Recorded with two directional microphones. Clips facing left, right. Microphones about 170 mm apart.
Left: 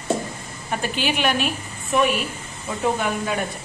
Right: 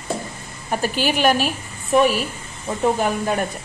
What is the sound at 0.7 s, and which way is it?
A woman's voice, 40° right (ahead or behind).